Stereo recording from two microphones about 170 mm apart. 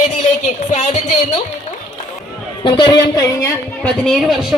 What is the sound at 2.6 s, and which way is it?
Speech, 25° left (ahead or behind).